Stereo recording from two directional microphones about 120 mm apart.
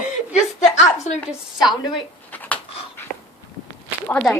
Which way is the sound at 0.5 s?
75° left (ahead or behind).